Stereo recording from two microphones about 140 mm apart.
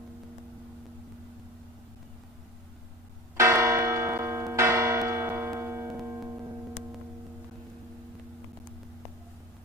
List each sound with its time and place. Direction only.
3.3 s church bell: 20° right (ahead or behind)
6.1 s music: 15° right (ahead or behind)